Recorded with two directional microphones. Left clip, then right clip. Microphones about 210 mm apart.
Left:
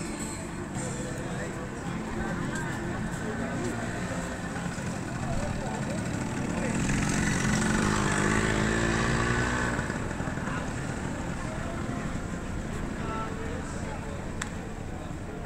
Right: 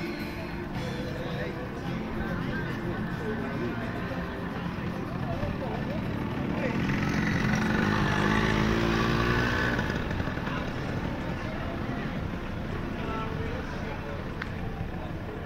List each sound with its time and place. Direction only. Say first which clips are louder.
6.8 s vehicle: even; centre (ahead or behind); by 9.9 s 45° right (ahead or behind)